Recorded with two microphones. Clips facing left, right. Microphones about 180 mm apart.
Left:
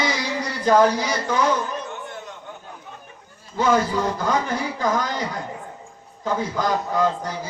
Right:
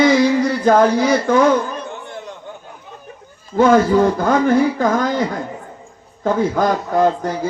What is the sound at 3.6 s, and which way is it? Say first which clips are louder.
A man's voice: right 8 dB; 50° right (ahead or behind).